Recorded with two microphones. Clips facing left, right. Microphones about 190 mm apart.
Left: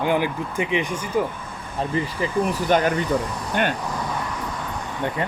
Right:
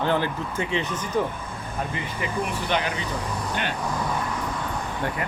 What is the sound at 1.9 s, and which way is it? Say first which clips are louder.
Speech: left 6 dB; 35° left (ahead or behind).